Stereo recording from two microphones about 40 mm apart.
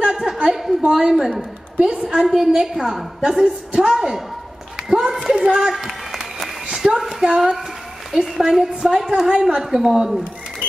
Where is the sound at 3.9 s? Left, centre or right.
Centre.